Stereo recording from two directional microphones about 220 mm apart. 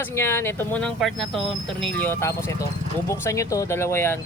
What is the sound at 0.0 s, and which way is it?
Speech, 10° left (ahead or behind).